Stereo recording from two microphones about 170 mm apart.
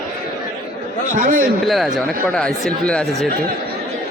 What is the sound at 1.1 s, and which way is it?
Speech, 50° right (ahead or behind).